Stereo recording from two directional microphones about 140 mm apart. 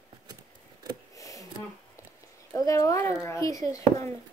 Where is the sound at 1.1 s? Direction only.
25° left (ahead or behind).